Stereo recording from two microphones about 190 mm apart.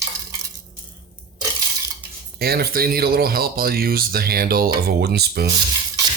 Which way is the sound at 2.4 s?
55° right (ahead or behind).